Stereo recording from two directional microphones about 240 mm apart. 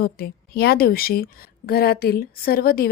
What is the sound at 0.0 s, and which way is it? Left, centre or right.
A woman's voice, left.